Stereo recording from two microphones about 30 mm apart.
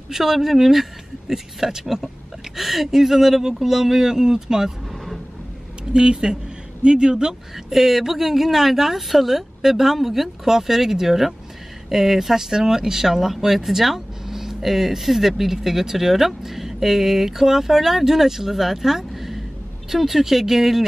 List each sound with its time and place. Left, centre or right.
0.1 s speech: centre
5.9 s speech: right
7.5 s speech: centre